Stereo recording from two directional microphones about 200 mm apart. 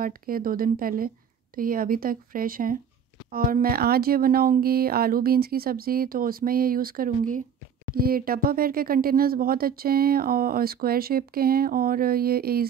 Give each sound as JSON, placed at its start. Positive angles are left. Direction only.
{"t": 0.0, "sound": "speech", "side_deg": -45}